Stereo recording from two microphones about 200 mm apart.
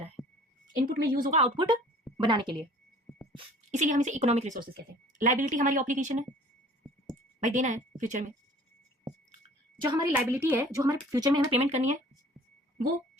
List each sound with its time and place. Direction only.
0.2 s a sound: centre (ahead or behind)
0.8 s a woman's voice: 40° right (ahead or behind)
1.4 s a woman's voice: 25° right (ahead or behind)
3.7 s a woman's voice: 40° right (ahead or behind)
7.3 s a woman's voice: 40° right (ahead or behind)
10.2 s a woman's voice: 10° right (ahead or behind); by 12.0 s 35° right (ahead or behind)